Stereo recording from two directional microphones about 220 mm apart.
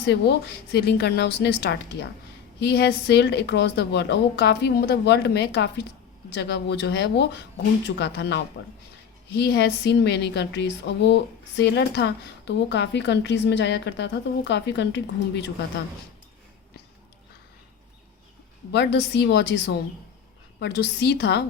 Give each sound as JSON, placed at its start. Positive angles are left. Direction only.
{"t": 0.0, "sound": "a woman's voice", "side_deg": 50}
{"t": 18.7, "sound": "a woman's voice", "side_deg": 50}